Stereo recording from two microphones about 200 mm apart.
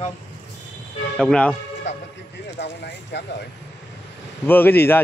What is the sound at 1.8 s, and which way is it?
Speech, 60° left (ahead or behind).